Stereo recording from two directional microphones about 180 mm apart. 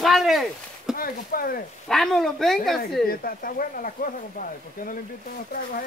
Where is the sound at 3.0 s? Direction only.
55° left (ahead or behind).